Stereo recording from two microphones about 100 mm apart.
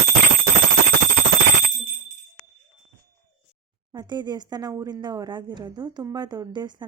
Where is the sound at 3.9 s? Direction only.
50° right (ahead or behind).